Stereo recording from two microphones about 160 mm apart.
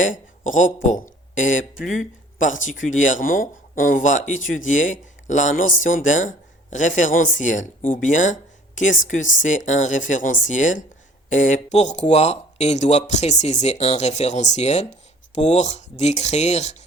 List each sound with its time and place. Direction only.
0.0 s speech: 55° left (ahead or behind)